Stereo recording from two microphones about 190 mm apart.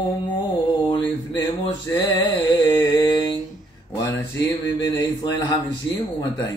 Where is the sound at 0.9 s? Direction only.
20° left (ahead or behind).